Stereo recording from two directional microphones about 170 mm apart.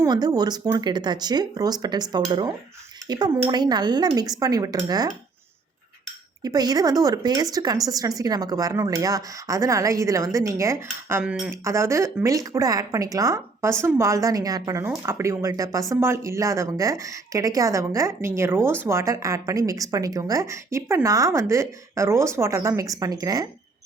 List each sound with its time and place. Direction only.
0.0 s a woman's voice: 20° right (ahead or behind)
6.4 s a woman's voice: 20° right (ahead or behind); by 11.5 s 5° right (ahead or behind)
11.6 s a woman's voice: 15° right (ahead or behind)